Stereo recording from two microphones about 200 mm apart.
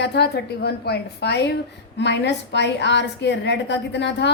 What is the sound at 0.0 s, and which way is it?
A woman's voice, 55° left (ahead or behind).